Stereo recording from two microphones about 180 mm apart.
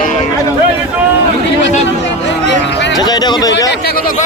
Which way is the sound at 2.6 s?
75° left (ahead or behind).